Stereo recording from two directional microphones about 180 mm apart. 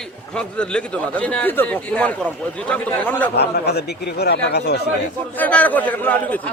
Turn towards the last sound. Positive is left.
turn(degrees=10)  # may be behind; listen again after turning